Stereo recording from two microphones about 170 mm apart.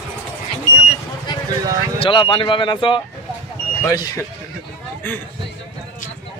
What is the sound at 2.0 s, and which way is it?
Speech, 30° left (ahead or behind).